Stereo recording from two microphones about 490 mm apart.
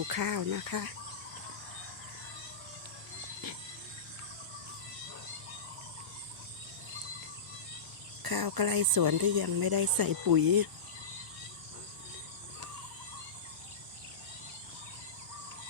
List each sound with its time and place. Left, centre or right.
0.1 s speech: right
8.2 s speech: right